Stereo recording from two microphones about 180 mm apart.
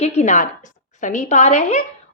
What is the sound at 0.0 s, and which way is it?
A woman's voice, 40° left (ahead or behind).